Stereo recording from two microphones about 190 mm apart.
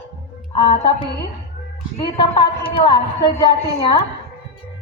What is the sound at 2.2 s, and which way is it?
A man's voice, 25° left (ahead or behind).